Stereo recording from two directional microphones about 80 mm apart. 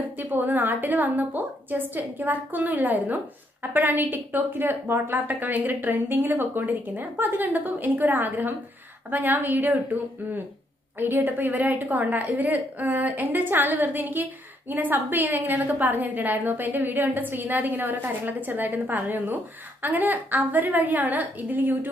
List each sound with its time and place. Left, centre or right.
0.2 s a woman's voice: right
11.0 s a woman's voice: right